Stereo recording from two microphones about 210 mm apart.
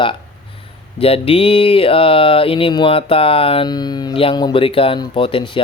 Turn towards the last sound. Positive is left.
turn(degrees=25)  # may be behind; listen again after turning